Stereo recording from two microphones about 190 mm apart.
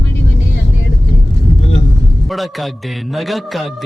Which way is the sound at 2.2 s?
Centre (ahead or behind).